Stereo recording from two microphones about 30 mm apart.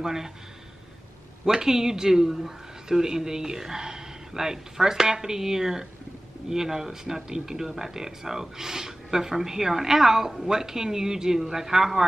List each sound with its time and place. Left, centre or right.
0.0 s a man's voice: centre
1.4 s a man's voice: centre